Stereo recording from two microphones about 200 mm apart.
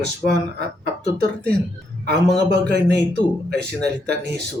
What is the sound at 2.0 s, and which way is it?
A man's voice, 55° right (ahead or behind).